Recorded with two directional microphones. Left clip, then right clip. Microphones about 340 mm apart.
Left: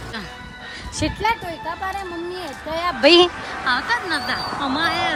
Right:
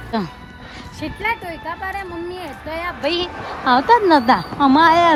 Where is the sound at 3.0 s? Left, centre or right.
Left.